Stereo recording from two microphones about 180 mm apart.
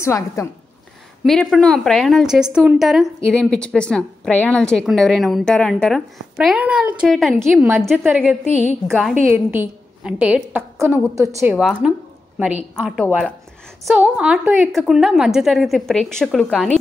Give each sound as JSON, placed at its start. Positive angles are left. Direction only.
{"t": 0.0, "sound": "a woman's voice", "side_deg": 15}
{"t": 1.2, "sound": "a woman's voice", "side_deg": 0}
{"t": 9.3, "sound": "a woman's voice", "side_deg": -10}
{"t": 11.5, "sound": "a woman's voice", "side_deg": -5}